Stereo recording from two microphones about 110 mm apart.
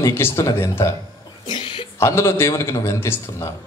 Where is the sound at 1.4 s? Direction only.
55° left (ahead or behind).